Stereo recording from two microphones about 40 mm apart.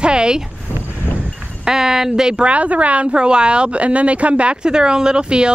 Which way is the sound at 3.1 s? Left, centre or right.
Right.